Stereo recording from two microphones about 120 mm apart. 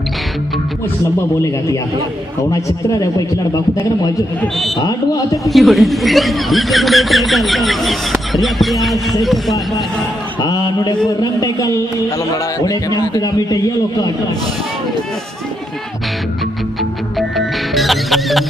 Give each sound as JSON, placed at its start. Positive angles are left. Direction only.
{"t": 2.5, "sound": "a man's voice", "side_deg": 30}
{"t": 4.7, "sound": "speech", "side_deg": 30}
{"t": 5.4, "sound": "speech", "side_deg": 0}
{"t": 10.4, "sound": "a man's voice", "side_deg": 35}
{"t": 17.7, "sound": "music", "side_deg": 0}